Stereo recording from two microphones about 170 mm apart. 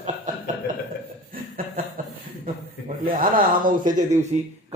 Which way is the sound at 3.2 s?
50° right (ahead or behind).